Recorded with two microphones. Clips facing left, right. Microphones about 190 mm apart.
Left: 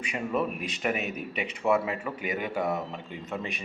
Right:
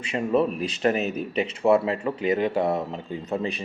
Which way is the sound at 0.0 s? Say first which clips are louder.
Right 7 dB; 30° right (ahead or behind).